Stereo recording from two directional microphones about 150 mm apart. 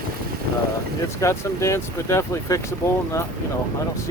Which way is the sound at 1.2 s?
20° left (ahead or behind).